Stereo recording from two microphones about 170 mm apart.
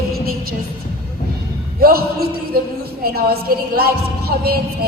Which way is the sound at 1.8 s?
65° right (ahead or behind).